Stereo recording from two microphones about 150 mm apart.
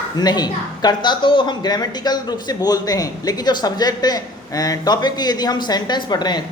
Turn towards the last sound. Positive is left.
turn(degrees=30)  # may be behind; listen again after turning